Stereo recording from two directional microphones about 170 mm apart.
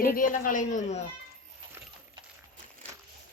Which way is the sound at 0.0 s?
55° left (ahead or behind).